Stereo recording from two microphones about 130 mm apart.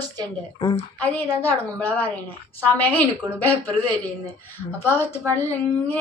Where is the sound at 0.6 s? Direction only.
35° left (ahead or behind).